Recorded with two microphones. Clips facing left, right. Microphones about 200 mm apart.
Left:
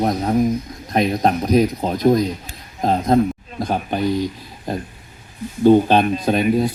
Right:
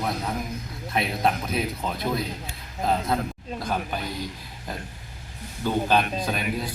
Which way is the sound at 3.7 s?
45° left (ahead or behind).